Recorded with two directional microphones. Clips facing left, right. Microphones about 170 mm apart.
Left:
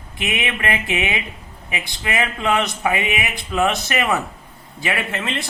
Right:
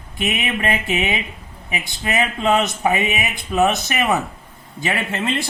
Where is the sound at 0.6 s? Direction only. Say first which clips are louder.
Right 2 dB; 25° right (ahead or behind).